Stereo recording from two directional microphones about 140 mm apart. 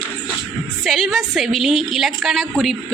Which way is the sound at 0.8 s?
Centre (ahead or behind).